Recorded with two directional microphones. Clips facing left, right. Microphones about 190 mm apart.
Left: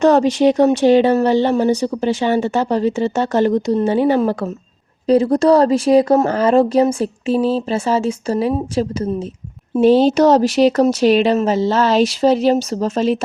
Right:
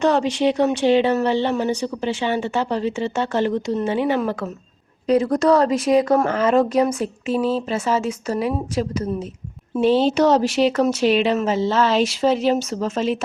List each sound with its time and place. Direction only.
0.0 s speech: 40° left (ahead or behind)
9.7 s speech: 40° left (ahead or behind)